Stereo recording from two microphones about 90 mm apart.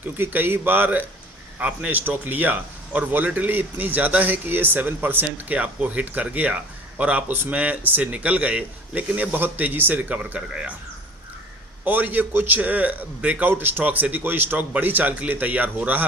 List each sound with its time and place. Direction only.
0.0 s a man's voice: 20° right (ahead or behind)
11.9 s a man's voice: 20° right (ahead or behind)